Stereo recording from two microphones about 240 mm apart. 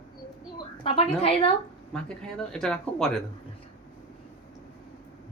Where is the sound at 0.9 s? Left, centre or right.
Left.